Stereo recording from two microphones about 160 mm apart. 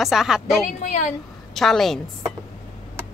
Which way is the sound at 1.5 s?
Centre (ahead or behind).